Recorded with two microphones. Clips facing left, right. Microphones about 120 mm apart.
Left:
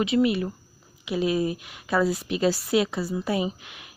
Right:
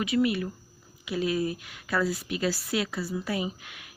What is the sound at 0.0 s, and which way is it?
A woman's voice, 25° left (ahead or behind).